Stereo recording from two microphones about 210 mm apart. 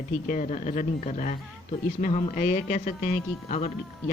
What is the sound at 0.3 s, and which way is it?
A woman's voice, 35° left (ahead or behind).